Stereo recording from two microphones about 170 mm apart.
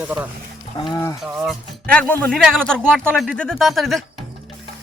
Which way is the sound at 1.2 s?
Centre (ahead or behind).